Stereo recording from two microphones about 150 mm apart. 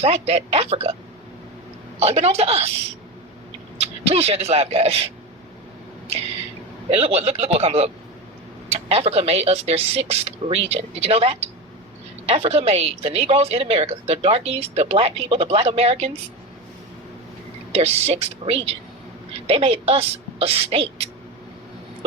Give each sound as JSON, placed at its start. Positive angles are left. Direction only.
{"t": 0.0, "sound": "a woman's voice", "side_deg": -45}
{"t": 2.0, "sound": "a woman's voice", "side_deg": -45}
{"t": 3.8, "sound": "a man's voice", "side_deg": -40}
{"t": 6.1, "sound": "a woman's voice", "side_deg": -45}
{"t": 17.7, "sound": "a woman's voice", "side_deg": -45}